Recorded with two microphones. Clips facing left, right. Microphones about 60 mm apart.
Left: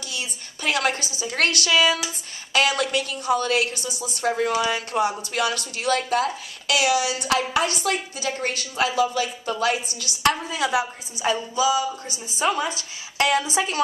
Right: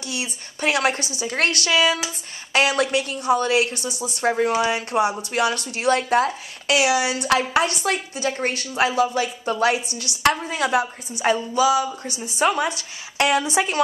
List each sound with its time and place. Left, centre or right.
0.1 s speech: right
3.2 s a woman's voice: right